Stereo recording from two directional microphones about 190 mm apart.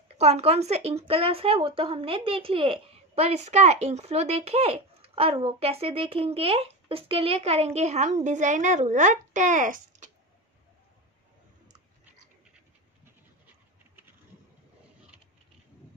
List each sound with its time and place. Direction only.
0.2 s a woman's voice: 35° right (ahead or behind)